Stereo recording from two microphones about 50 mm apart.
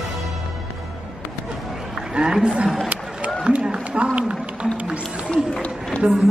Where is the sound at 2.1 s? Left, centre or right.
Centre.